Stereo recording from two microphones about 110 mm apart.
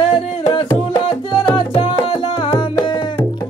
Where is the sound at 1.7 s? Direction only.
60° left (ahead or behind).